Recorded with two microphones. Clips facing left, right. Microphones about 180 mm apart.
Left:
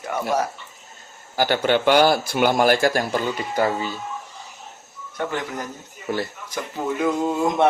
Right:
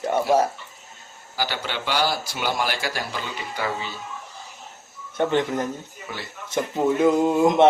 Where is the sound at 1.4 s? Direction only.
55° left (ahead or behind).